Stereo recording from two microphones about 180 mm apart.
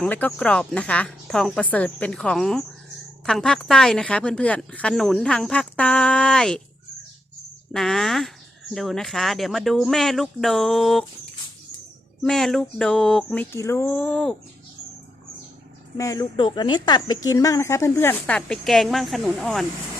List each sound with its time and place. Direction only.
0.0 s speech: 5° left (ahead or behind)
7.7 s speech: centre (ahead or behind)
12.2 s speech: centre (ahead or behind)
16.0 s speech: 20° left (ahead or behind); by 19.6 s centre (ahead or behind)